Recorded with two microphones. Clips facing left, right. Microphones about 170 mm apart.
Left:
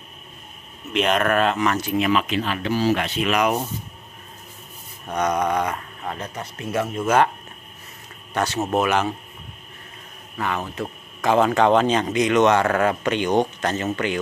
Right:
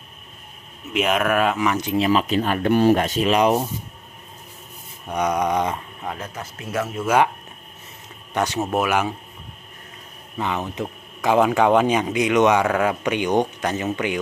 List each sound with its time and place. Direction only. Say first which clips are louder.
0.9 s speech: even; 5° right (ahead or behind)
2.0 s speech: right 3 dB; 35° right (ahead or behind)
5.0 s speech: even; 10° right (ahead or behind)
6.0 s speech: left 1 dB; 5° right (ahead or behind)
8.4 s speech: even; 15° right (ahead or behind)
10.3 s speech: right 1 dB; 20° right (ahead or behind)